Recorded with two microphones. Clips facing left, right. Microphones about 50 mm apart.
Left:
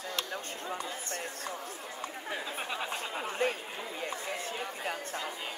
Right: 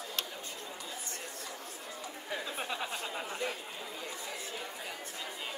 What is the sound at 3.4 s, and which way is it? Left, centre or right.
Chatter, left.